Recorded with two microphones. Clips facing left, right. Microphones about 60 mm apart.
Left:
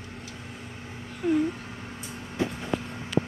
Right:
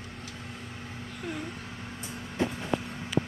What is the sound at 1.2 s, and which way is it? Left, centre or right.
Speech, centre.